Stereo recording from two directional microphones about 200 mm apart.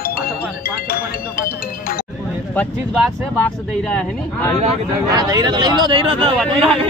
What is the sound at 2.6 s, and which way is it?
Speech, 10° left (ahead or behind).